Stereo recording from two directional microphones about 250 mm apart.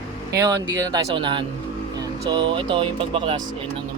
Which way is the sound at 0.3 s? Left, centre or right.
Centre.